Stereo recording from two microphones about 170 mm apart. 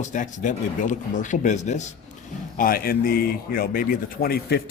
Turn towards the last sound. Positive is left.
turn(degrees=65)  # may be behind; listen again after turning